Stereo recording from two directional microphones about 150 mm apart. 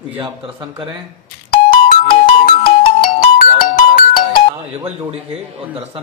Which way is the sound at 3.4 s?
75° left (ahead or behind).